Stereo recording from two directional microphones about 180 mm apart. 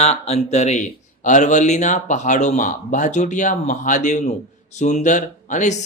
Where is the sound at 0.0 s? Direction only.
35° left (ahead or behind).